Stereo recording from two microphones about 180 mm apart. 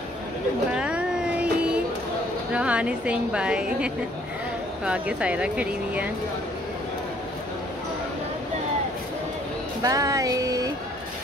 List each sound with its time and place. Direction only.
0.7 s vehicle: 5° right (ahead or behind)
2.5 s a woman's voice: 5° right (ahead or behind)
9.8 s a sound: 20° right (ahead or behind)